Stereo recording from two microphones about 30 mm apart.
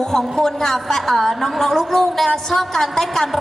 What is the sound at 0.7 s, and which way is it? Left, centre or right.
A woman's voice, centre.